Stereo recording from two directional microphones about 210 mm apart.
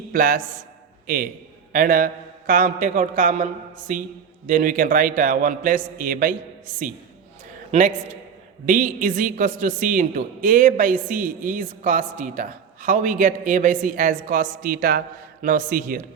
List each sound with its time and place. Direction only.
0.1 s a man's voice: 40° right (ahead or behind)
7.7 s speech: 40° right (ahead or behind)